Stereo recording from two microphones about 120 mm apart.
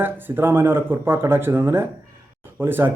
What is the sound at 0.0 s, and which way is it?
A man's voice, 15° right (ahead or behind).